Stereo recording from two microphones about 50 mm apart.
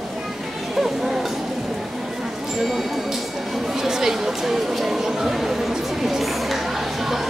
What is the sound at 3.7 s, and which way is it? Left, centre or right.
Chatter, centre.